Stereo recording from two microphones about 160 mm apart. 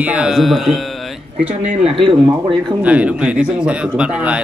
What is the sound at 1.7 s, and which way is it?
Speech, 40° right (ahead or behind).